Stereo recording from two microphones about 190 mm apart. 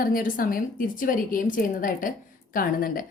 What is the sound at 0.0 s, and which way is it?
A woman's voice, 50° left (ahead or behind).